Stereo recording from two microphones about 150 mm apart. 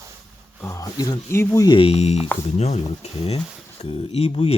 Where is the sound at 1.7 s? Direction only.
35° left (ahead or behind).